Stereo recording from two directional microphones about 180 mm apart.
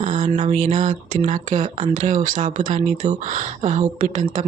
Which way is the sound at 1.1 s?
45° right (ahead or behind).